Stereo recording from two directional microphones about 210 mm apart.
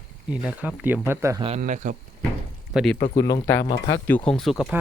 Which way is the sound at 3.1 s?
15° left (ahead or behind).